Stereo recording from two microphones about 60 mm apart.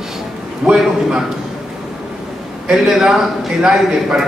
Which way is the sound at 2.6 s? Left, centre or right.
Centre.